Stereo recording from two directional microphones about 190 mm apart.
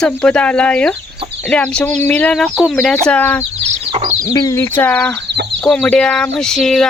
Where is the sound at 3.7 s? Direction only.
30° right (ahead or behind).